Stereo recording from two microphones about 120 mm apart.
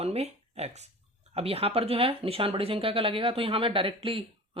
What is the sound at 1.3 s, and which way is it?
Speech, 55° right (ahead or behind).